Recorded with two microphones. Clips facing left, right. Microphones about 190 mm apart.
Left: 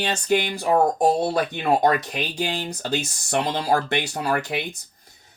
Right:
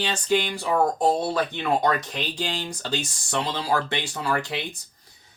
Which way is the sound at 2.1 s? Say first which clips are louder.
Left 3 dB; 10° left (ahead or behind).